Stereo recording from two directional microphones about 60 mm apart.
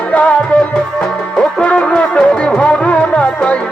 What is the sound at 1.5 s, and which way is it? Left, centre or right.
Music, centre.